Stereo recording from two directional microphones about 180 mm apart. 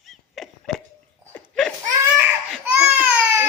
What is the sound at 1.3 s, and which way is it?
Laughter, 5° left (ahead or behind).